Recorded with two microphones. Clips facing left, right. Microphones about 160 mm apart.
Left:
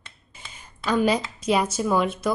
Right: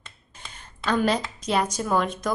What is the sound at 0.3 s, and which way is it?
A woman's voice, 5° left (ahead or behind).